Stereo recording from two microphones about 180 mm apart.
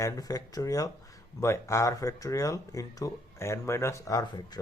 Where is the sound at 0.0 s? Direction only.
20° left (ahead or behind).